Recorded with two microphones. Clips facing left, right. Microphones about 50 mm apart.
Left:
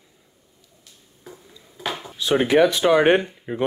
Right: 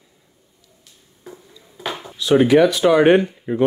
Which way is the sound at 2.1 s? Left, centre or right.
Left.